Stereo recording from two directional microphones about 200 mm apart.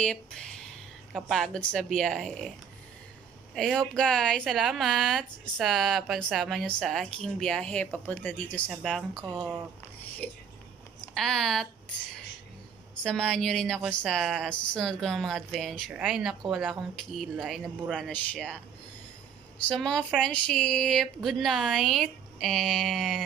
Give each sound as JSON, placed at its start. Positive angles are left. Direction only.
{"t": 0.0, "sound": "a sound", "side_deg": 5}
{"t": 1.1, "sound": "speech", "side_deg": 0}
{"t": 3.5, "sound": "speech", "side_deg": 0}
{"t": 9.2, "sound": "speech", "side_deg": -20}
{"t": 10.2, "sound": "speech", "side_deg": 5}
{"t": 13.0, "sound": "speech", "side_deg": 5}
{"t": 19.7, "sound": "speech", "side_deg": 5}